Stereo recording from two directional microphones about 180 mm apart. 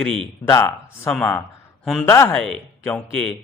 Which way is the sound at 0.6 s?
5° left (ahead or behind).